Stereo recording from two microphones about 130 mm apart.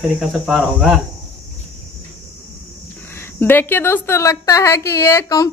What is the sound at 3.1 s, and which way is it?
A woman's voice, 15° left (ahead or behind).